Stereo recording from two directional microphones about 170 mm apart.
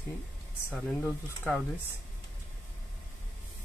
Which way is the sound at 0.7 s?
Centre (ahead or behind).